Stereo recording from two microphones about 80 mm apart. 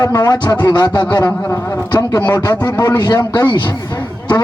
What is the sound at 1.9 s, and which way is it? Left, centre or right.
A man's voice, left.